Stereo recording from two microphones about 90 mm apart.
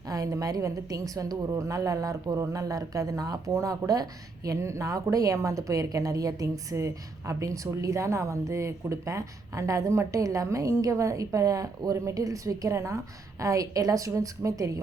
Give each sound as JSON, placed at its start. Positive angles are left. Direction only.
{"t": 0.1, "sound": "a woman's voice", "side_deg": -40}